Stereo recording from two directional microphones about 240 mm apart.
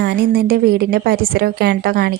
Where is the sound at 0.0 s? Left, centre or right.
Right.